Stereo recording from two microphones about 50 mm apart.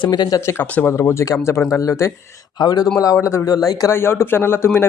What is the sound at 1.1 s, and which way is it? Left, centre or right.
Speech, left.